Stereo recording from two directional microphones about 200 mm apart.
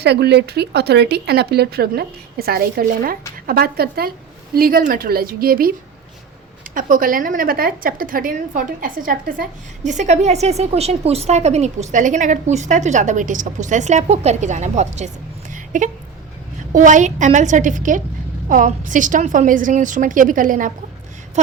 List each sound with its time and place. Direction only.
0.0 s speech: 55° right (ahead or behind)
6.7 s a woman's voice: 45° right (ahead or behind)
15.5 s a sound: 40° right (ahead or behind)
16.7 s a woman's voice: 40° right (ahead or behind)